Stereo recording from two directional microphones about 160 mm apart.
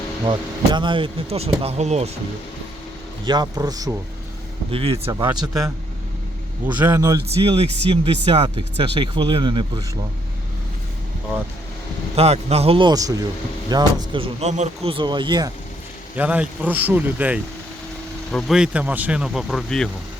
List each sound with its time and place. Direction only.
0.3 s speech: 30° right (ahead or behind)
3.2 s speech: 25° right (ahead or behind)
4.7 s speech: 35° right (ahead or behind)
5.1 s speech: 25° right (ahead or behind)
6.7 s speech: 10° right (ahead or behind)
7.3 s speech: 35° right (ahead or behind)
12.1 s speech: 40° right (ahead or behind)
14.4 s speech: 45° right (ahead or behind)
14.9 s speech: 30° right (ahead or behind)
16.1 s speech: 10° right (ahead or behind)
18.3 s speech: centre (ahead or behind)